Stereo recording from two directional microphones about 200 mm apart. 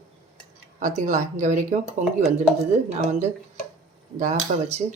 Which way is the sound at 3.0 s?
35° right (ahead or behind).